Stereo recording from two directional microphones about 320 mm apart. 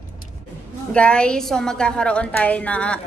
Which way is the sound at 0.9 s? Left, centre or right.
Centre.